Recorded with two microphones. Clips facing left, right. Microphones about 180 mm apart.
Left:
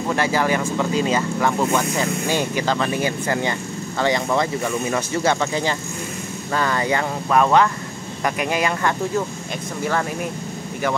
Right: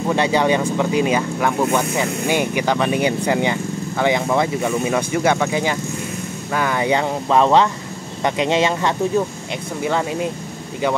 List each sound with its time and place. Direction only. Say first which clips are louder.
0.1 s speech: right 3 dB; 20° right (ahead or behind)